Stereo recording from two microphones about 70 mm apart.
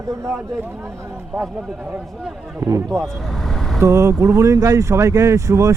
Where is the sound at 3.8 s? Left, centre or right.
Right.